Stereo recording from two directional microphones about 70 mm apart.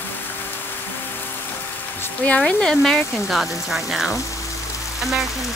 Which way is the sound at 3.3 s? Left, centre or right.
Centre.